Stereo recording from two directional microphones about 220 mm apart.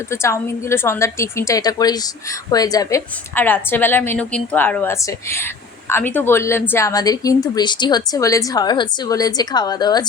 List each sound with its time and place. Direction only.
0.1 s speech: 10° left (ahead or behind)